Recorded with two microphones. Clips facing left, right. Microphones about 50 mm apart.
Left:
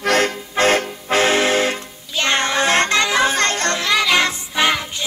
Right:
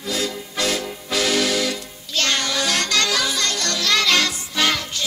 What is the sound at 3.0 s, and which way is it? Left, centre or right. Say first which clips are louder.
Music: left 5 dB; left.